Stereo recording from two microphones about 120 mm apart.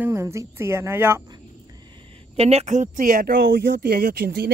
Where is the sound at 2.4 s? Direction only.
60° right (ahead or behind); by 3.2 s 90° right.